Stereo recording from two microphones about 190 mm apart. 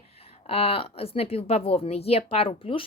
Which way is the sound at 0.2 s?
30° left (ahead or behind).